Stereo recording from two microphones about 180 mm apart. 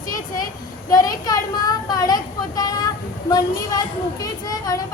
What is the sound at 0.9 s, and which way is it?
Speech, 20° left (ahead or behind).